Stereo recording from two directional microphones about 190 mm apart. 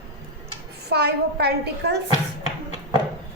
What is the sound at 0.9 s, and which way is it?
A woman's voice, 60° right (ahead or behind).